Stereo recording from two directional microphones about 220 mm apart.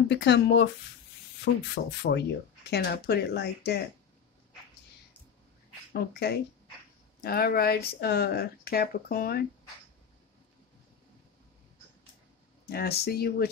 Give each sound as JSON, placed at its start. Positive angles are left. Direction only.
{"t": 0.1, "sound": "speech", "side_deg": 50}
{"t": 5.9, "sound": "speech", "side_deg": 45}
{"t": 12.6, "sound": "speech", "side_deg": 45}